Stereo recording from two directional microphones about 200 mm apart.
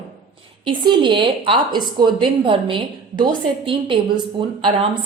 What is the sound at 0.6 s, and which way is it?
A woman's voice, 25° right (ahead or behind).